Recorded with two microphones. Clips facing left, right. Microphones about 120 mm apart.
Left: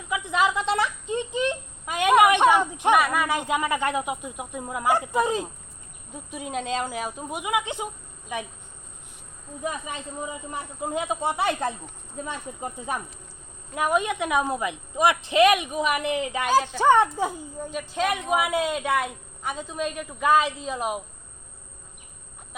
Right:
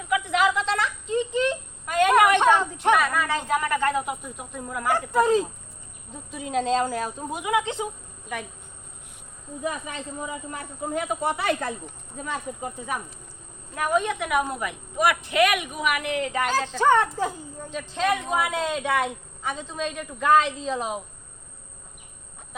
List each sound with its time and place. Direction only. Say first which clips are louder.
0.1 s a sound: right 2 dB; 20° left (ahead or behind)
6.3 s a woman's voice: right 5 dB; 5° left (ahead or behind)
9.6 s speech: right 1 dB; 20° left (ahead or behind)
13.7 s a woman's voice: even; 15° left (ahead or behind)